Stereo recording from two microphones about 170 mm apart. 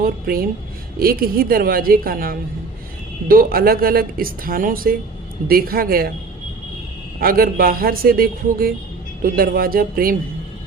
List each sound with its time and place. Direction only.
0.0 s a woman's voice: 60° right (ahead or behind)
7.2 s speech: 60° right (ahead or behind)